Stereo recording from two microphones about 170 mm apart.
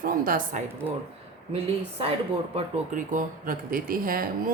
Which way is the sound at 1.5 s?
35° right (ahead or behind).